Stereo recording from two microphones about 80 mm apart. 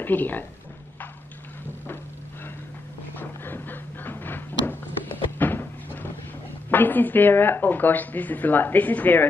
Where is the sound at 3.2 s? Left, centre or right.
Left.